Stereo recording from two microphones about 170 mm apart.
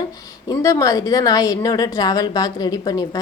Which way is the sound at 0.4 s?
20° left (ahead or behind).